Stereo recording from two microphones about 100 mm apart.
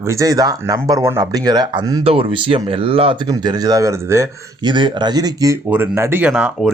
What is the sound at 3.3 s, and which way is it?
Speech, 45° right (ahead or behind).